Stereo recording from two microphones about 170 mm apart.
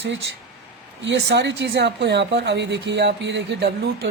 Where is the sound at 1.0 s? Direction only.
90° right.